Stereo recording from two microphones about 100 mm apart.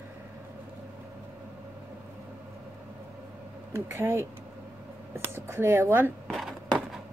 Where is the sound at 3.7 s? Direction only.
25° right (ahead or behind).